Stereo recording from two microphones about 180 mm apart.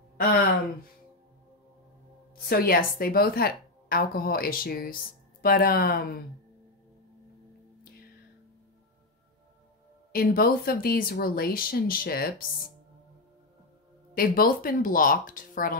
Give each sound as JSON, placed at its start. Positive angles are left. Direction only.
{"t": 2.3, "sound": "a woman's voice", "side_deg": 55}
{"t": 10.1, "sound": "a woman's voice", "side_deg": 55}
{"t": 14.1, "sound": "speech", "side_deg": 55}